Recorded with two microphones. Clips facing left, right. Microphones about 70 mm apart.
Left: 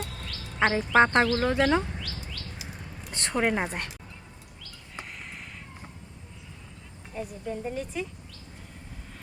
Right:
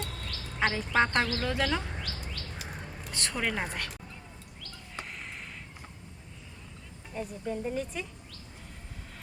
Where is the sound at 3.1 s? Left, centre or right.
Left.